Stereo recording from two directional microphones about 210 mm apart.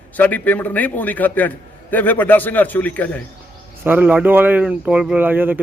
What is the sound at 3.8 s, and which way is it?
Speech, 10° right (ahead or behind).